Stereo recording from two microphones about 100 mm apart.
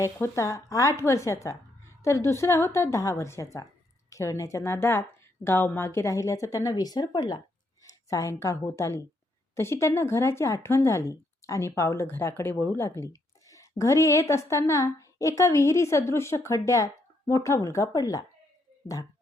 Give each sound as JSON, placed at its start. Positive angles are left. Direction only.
{"t": 0.0, "sound": "a woman's voice", "side_deg": 30}